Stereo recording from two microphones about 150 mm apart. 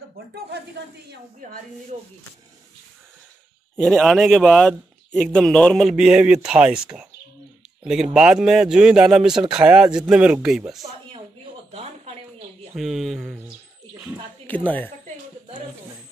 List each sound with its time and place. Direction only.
3.7 s speech: 5° left (ahead or behind)
11.7 s a sound: 45° right (ahead or behind)
12.7 s speech: centre (ahead or behind)
14.5 s a woman's voice: 10° left (ahead or behind)